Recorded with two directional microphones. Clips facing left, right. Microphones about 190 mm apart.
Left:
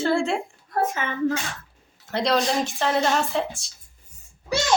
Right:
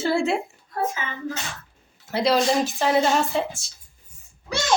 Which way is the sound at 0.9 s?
55° left (ahead or behind).